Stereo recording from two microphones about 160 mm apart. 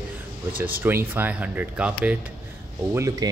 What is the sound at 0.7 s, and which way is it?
Speech, 10° right (ahead or behind).